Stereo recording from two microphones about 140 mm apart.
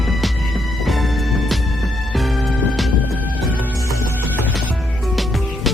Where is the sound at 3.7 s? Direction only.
20° right (ahead or behind).